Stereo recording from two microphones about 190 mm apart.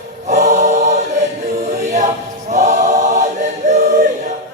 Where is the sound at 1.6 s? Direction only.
40° right (ahead or behind).